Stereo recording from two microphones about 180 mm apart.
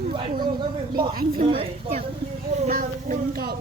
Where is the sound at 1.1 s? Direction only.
55° right (ahead or behind).